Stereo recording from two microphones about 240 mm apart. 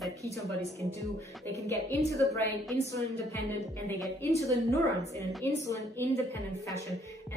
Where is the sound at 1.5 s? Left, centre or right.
Centre.